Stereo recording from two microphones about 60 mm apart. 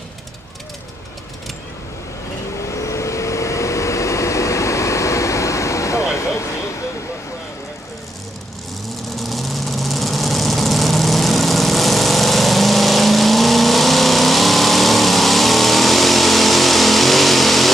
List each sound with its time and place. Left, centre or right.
2.6 s vehicle: left
9.1 s vehicle: centre